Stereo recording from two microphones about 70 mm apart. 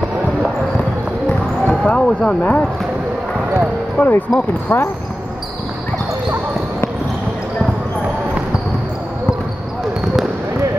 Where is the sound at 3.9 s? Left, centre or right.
Left.